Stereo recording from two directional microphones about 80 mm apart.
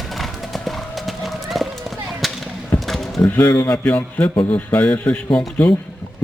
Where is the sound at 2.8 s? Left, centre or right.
Centre.